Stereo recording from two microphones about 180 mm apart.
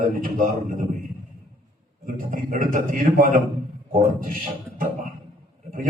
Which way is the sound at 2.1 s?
45° right (ahead or behind).